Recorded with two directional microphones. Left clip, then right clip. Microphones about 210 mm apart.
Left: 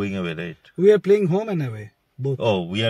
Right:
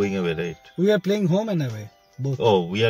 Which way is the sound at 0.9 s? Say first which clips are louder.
Left 6 dB; 5° right (ahead or behind).